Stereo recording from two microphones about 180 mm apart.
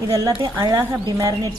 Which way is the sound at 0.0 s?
15° right (ahead or behind).